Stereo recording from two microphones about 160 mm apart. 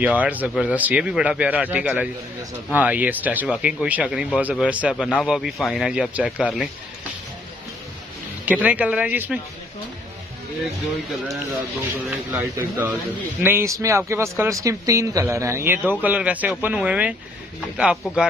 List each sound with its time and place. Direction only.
0.0 s speech: 10° right (ahead or behind)
8.5 s speech: 10° right (ahead or behind)
12.4 s speech: 15° right (ahead or behind)